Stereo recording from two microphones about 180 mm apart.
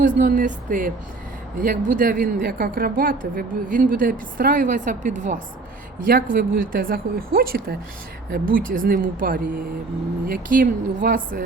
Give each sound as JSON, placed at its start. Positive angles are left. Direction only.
{"t": 0.2, "sound": "a woman's voice", "side_deg": -50}